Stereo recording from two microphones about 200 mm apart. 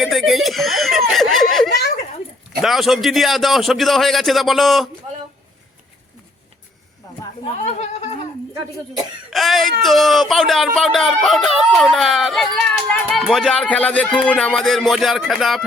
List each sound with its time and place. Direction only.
0.0 s a sound: centre (ahead or behind)
1.1 s snicker: centre (ahead or behind)
2.6 s speech: centre (ahead or behind)
7.4 s speech: 35° left (ahead or behind)
9.3 s speech: centre (ahead or behind)